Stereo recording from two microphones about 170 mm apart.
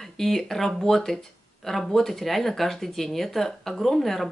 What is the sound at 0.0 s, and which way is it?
Speech, centre (ahead or behind).